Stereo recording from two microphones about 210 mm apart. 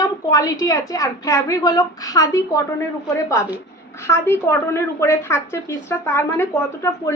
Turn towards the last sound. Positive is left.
turn(degrees=10)  # may be behind; listen again after turning